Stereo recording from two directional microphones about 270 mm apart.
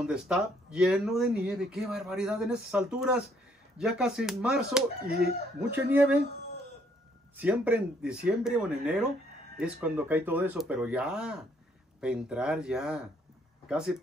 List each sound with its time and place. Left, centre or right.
0.0 s speech: centre
7.3 s speech: centre